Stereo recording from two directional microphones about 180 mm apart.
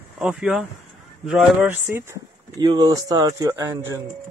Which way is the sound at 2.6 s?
20° right (ahead or behind).